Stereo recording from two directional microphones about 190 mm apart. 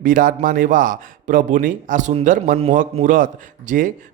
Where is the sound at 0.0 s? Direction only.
45° right (ahead or behind).